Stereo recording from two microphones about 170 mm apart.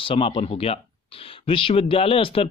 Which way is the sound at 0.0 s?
35° left (ahead or behind).